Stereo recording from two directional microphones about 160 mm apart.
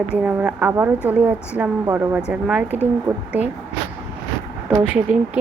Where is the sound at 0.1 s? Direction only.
10° right (ahead or behind).